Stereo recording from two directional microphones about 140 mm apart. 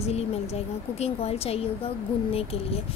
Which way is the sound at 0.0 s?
50° left (ahead or behind).